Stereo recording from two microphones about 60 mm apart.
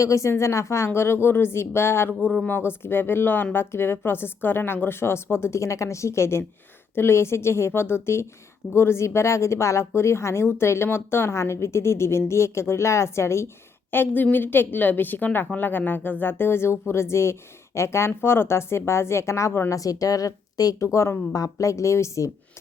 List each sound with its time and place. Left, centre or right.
0.0 s a woman's voice: left
13.9 s a woman's voice: left
19.7 s speech: left
20.8 s speech: left
21.3 s speech: left